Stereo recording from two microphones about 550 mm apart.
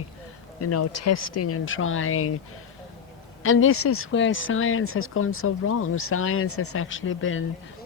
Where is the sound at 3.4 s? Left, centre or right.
Left.